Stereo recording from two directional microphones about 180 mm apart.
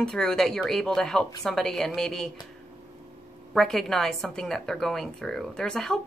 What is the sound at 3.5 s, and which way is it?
Speech, centre (ahead or behind).